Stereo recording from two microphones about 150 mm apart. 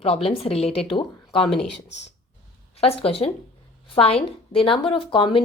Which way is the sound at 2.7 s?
40° left (ahead or behind).